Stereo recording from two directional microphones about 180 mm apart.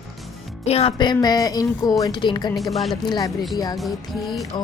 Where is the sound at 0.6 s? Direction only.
35° left (ahead or behind).